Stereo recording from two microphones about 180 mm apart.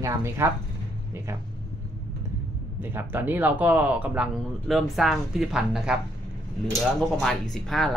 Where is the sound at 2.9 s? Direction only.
10° right (ahead or behind).